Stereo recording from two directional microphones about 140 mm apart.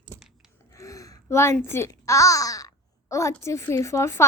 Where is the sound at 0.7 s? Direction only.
20° left (ahead or behind).